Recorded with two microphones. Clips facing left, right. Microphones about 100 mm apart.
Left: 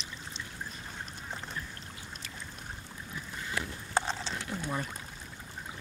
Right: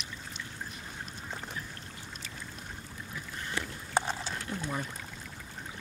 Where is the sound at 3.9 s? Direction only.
10° right (ahead or behind).